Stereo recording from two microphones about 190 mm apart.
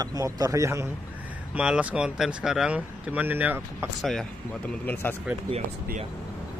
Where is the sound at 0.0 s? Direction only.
20° right (ahead or behind).